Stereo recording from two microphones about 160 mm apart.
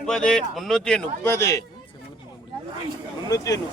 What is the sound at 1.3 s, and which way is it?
Speech, 20° left (ahead or behind).